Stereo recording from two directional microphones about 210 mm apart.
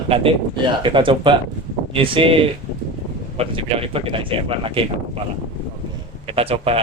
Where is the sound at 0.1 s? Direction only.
25° right (ahead or behind).